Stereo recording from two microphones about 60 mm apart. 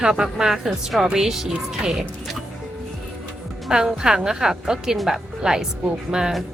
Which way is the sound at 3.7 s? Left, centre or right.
Centre.